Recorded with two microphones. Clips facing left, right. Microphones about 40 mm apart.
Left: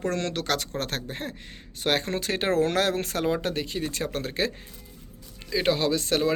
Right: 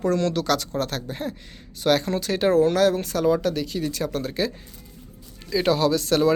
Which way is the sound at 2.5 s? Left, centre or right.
Left.